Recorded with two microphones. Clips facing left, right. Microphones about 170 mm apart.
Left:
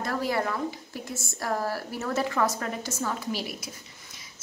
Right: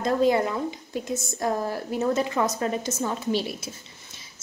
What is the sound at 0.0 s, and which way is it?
A woman's voice, 20° right (ahead or behind).